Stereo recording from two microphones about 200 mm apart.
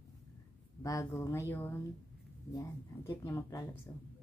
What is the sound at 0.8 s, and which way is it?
Speech, 15° left (ahead or behind).